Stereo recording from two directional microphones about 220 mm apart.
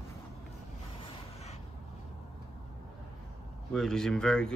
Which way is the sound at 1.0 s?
25° left (ahead or behind).